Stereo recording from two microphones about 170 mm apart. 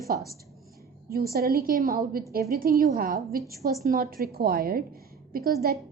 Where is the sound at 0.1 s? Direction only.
55° right (ahead or behind).